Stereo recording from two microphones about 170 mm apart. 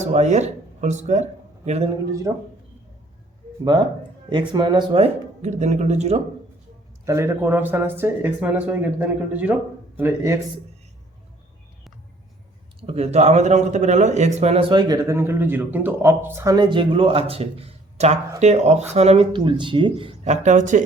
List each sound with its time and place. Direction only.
0.0 s speech: 40° right (ahead or behind)
2.3 s speech: 15° right (ahead or behind)
4.3 s a man's voice: 25° right (ahead or behind)
7.0 s speech: 15° right (ahead or behind)
12.8 s a man's voice: 35° right (ahead or behind)
20.2 s speech: 45° right (ahead or behind)